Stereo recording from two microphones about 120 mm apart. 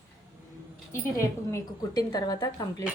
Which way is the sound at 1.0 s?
25° left (ahead or behind).